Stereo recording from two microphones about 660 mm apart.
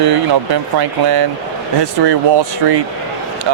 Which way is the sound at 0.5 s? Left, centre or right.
Right.